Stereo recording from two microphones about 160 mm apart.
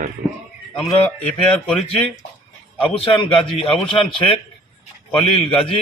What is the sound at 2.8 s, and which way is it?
A man's voice, 30° left (ahead or behind).